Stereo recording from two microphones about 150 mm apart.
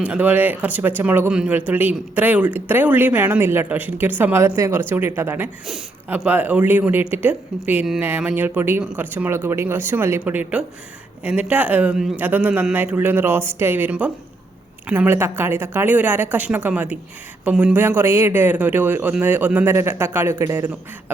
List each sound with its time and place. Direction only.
0.0 s speech: 10° right (ahead or behind)
5.6 s speech: 5° right (ahead or behind)